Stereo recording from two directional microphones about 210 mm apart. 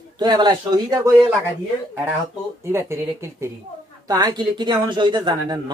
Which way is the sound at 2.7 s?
15° right (ahead or behind).